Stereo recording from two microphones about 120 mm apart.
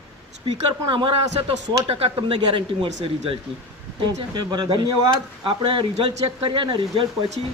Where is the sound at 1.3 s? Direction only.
55° right (ahead or behind).